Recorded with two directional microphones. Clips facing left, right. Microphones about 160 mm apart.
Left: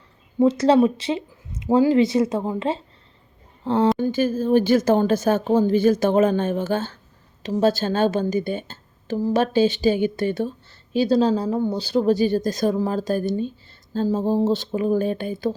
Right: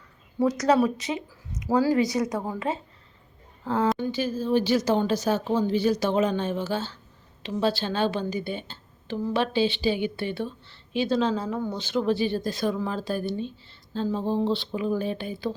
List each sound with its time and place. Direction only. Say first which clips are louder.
0.3 s speech: left 5 dB; 25° left (ahead or behind)
3.9 s a woman's voice: left 6 dB; 50° left (ahead or behind)